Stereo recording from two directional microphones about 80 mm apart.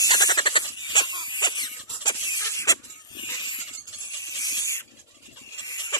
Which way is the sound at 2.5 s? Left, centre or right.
Left.